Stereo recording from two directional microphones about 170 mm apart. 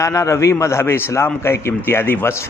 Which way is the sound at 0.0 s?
20° left (ahead or behind).